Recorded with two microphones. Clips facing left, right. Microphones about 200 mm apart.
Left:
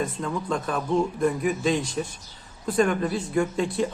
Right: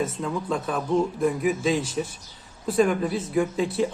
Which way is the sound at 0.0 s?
Centre (ahead or behind).